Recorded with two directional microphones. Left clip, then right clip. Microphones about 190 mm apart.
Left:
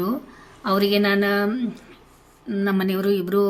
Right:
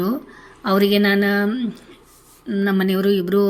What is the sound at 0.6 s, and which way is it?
A woman's voice, 20° right (ahead or behind).